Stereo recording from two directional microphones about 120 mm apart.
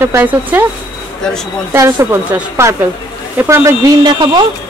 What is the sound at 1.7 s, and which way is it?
Speech, 25° right (ahead or behind).